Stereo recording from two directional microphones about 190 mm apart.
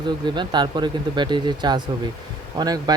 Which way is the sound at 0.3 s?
25° right (ahead or behind).